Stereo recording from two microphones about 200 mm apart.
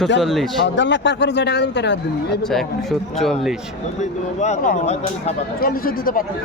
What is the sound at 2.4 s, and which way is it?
Speech, centre (ahead or behind).